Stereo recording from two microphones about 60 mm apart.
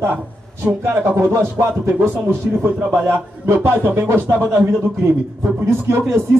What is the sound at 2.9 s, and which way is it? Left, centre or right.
Speech, right.